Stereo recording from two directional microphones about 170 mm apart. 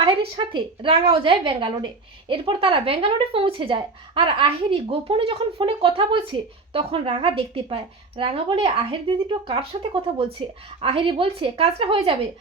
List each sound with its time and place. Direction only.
0.0 s a woman's voice: 30° right (ahead or behind)